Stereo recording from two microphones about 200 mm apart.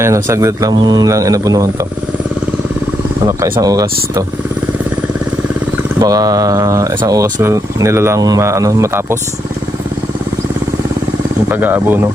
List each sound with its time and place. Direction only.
0.0 s speech: 15° right (ahead or behind)
3.2 s speech: 15° right (ahead or behind)
6.0 s speech: 15° right (ahead or behind)
11.4 s speech: 10° right (ahead or behind)